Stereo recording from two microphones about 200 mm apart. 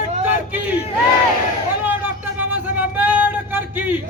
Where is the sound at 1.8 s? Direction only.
10° right (ahead or behind).